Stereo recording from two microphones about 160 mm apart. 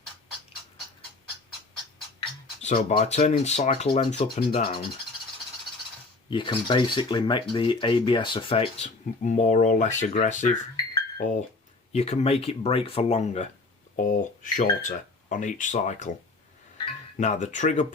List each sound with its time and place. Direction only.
2.6 s speech: 45° left (ahead or behind)
6.3 s speech: 30° left (ahead or behind); by 16.1 s 50° left (ahead or behind)
17.2 s speech: 50° left (ahead or behind)